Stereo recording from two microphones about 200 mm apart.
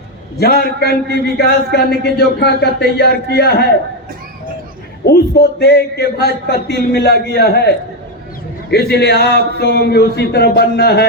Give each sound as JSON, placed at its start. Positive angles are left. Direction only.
{"t": 0.3, "sound": "speech", "side_deg": 50}
{"t": 5.0, "sound": "speech", "side_deg": 55}